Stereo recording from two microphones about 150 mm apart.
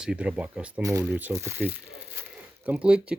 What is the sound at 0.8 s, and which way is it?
Speech, 20° right (ahead or behind).